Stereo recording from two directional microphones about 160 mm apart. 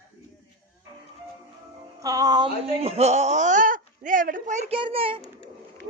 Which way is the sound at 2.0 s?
20° right (ahead or behind).